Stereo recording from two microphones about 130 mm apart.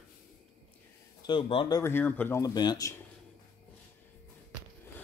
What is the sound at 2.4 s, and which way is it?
Speech, 30° left (ahead or behind).